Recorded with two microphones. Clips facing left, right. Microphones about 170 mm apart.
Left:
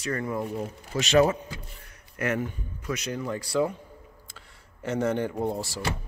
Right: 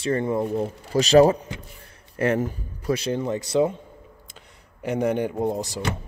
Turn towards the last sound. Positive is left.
turn(degrees=-20)  # may be behind; listen again after turning